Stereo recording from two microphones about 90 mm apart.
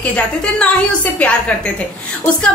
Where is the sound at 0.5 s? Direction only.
15° left (ahead or behind).